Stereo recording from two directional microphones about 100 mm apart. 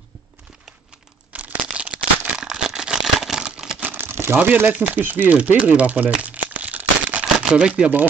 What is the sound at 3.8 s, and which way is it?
Crumpling, 20° right (ahead or behind).